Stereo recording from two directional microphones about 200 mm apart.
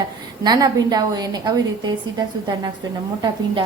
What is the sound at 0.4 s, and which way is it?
A woman's voice, 20° right (ahead or behind).